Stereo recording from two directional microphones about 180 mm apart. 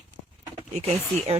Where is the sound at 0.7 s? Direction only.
35° right (ahead or behind).